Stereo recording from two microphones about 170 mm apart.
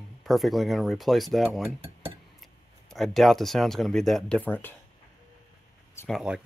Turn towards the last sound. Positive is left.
turn(degrees=0)  # may be behind; listen again after turning